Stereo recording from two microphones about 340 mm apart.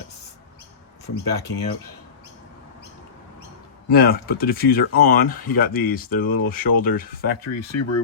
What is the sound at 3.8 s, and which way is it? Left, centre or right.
Speech, left.